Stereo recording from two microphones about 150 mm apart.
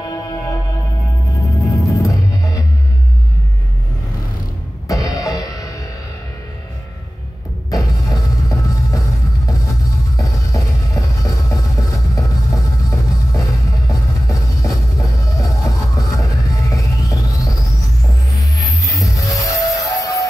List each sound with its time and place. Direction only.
1.4 s music: 20° left (ahead or behind)
4.8 s music: 20° left (ahead or behind)
8.0 s music: 25° left (ahead or behind)